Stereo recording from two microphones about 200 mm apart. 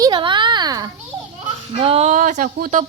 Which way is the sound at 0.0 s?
25° right (ahead or behind).